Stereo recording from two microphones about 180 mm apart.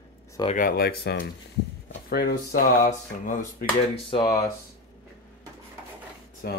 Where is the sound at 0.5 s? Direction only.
55° left (ahead or behind).